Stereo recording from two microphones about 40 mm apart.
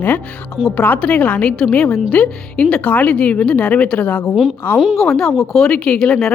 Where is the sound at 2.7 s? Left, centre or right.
Left.